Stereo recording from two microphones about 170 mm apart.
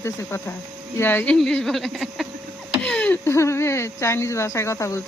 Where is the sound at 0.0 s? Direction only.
15° left (ahead or behind).